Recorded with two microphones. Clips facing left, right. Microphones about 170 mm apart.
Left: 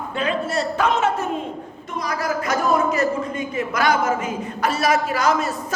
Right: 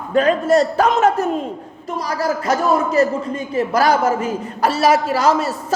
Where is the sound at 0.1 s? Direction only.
40° right (ahead or behind).